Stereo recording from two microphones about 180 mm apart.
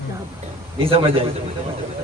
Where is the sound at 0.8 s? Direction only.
30° right (ahead or behind).